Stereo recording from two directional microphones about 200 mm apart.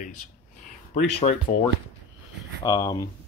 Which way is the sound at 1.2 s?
35° left (ahead or behind).